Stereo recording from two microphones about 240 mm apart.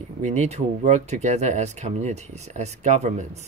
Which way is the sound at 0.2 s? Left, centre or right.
Right.